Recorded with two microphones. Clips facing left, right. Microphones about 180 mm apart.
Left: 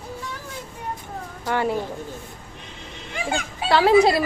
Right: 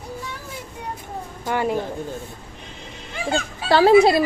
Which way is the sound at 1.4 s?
15° right (ahead or behind).